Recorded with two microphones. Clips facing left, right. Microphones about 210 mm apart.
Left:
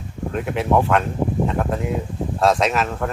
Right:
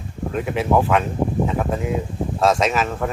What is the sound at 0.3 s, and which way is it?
Speech, centre (ahead or behind).